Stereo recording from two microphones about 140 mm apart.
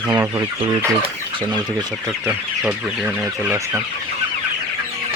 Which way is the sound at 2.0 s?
20° right (ahead or behind).